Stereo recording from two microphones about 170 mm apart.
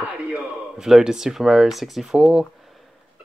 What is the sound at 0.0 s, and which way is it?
Speech, 5° right (ahead or behind).